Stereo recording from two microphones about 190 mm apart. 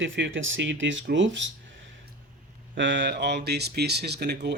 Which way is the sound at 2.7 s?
70° right (ahead or behind).